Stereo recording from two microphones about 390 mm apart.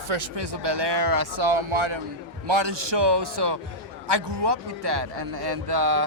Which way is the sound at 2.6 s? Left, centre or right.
Right.